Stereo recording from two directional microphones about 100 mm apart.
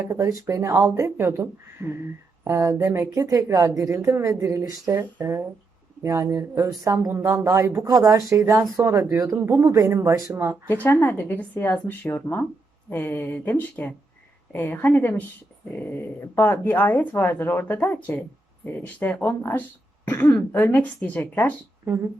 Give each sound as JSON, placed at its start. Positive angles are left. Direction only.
{"t": 0.1, "sound": "speech", "side_deg": -30}
{"t": 10.7, "sound": "speech", "side_deg": 20}
{"t": 16.2, "sound": "speech", "side_deg": 25}